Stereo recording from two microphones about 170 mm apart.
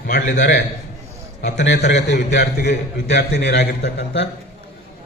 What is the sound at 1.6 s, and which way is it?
Speech, 85° left.